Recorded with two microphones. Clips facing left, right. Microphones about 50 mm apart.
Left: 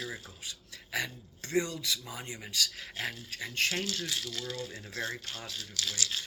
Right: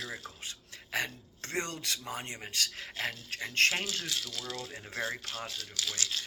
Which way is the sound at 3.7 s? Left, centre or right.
Centre.